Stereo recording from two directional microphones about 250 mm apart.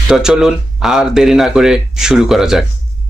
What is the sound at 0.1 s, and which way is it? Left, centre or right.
Speech, centre.